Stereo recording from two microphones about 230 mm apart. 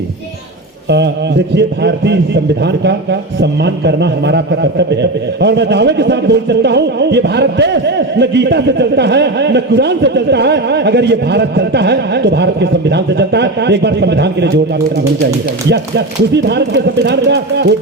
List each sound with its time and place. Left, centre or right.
0.9 s a man's voice: right
15.7 s a man's voice: right